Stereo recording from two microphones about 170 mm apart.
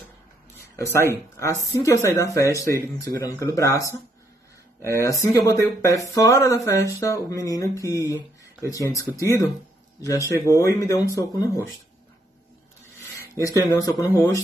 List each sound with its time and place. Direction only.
0.7 s speech: 15° left (ahead or behind)
5.0 s speech: 20° left (ahead or behind)
13.2 s speech: 20° left (ahead or behind)